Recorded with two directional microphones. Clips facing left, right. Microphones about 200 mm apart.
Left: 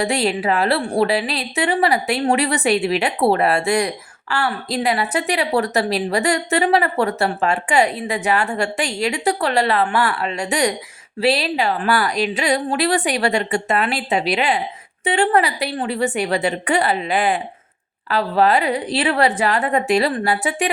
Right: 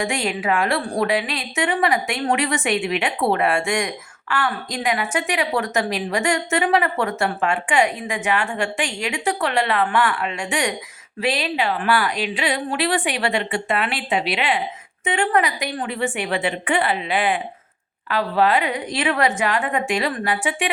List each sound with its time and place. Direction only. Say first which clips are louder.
0.0 s a woman's voice: left 4 dB; 35° left (ahead or behind)